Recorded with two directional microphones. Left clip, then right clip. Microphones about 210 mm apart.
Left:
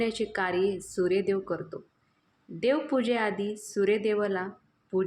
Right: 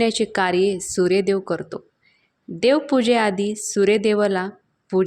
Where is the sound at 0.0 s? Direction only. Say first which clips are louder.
Right 9 dB; 35° right (ahead or behind).